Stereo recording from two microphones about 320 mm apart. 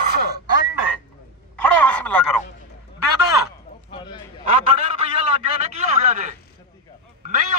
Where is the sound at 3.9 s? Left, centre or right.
Centre.